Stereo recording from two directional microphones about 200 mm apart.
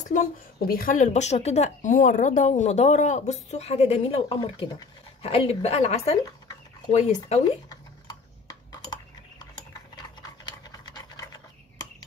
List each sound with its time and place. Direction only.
0.1 s a woman's voice: 45° left (ahead or behind)
8.5 s dishes: 20° left (ahead or behind)
9.9 s a sound: 20° left (ahead or behind)